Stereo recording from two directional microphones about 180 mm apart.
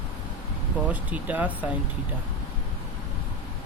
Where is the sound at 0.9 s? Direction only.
10° right (ahead or behind).